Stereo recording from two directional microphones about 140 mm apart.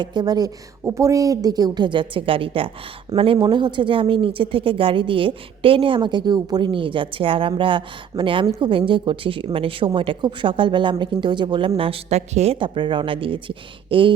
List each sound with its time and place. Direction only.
0.0 s a woman's voice: 30° right (ahead or behind)
11.8 s a woman's voice: 45° right (ahead or behind)
12.5 s a woman's voice: 35° right (ahead or behind)